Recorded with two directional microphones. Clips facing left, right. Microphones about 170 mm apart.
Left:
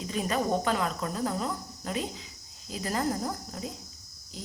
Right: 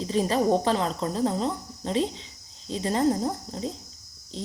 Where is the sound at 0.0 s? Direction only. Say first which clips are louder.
Right 6 dB; 30° right (ahead or behind).